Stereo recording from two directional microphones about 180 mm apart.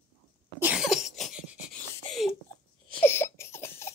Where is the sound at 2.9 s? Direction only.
10° left (ahead or behind).